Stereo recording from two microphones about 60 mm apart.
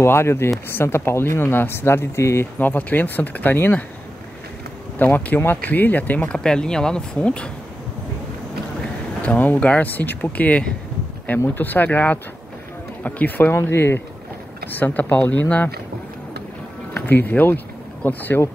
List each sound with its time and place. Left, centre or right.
0.0 s speech: left
2.6 s speech: left
4.9 s speech: left
9.2 s speech: left
13.5 s speech: left
14.7 s speech: left
16.9 s speech: left